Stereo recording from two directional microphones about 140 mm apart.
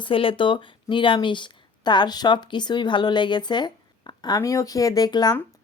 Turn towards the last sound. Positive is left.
turn(degrees=30)  # may be behind; listen again after turning